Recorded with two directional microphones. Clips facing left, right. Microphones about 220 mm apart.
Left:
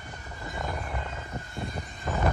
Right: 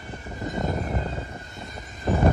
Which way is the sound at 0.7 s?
40° right (ahead or behind).